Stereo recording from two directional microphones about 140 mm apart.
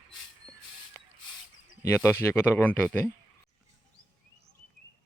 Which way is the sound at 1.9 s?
15° left (ahead or behind).